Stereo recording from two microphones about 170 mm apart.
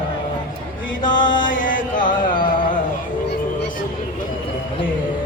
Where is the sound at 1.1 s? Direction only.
50° left (ahead or behind).